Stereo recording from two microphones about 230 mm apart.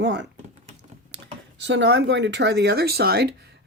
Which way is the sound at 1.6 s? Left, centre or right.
Right.